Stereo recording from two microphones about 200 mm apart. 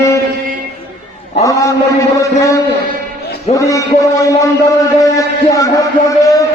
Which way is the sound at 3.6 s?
15° left (ahead or behind).